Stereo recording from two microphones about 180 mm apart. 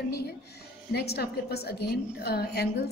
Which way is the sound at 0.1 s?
60° left (ahead or behind).